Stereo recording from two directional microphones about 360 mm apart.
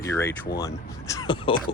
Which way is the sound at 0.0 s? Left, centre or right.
Centre.